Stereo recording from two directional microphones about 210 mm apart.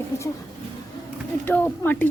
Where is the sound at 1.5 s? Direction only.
10° left (ahead or behind).